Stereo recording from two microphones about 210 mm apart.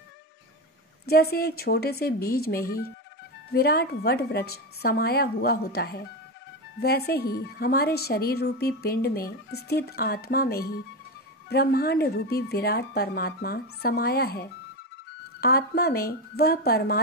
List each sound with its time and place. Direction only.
1.0 s a woman's voice: 50° left (ahead or behind)